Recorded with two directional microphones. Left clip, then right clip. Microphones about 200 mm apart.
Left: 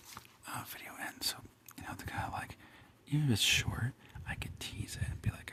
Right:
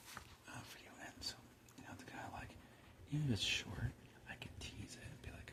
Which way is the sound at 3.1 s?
35° left (ahead or behind).